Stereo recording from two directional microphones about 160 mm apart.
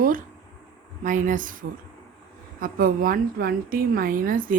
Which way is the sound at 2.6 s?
60° right (ahead or behind).